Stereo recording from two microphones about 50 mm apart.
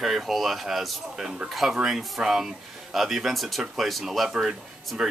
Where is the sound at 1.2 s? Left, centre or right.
Centre.